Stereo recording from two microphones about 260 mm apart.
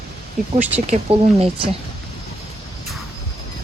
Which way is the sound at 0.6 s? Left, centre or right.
Centre.